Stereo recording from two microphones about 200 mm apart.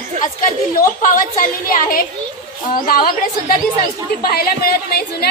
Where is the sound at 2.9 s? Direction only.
45° left (ahead or behind).